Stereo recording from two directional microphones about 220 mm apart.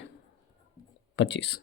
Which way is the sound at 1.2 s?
55° left (ahead or behind).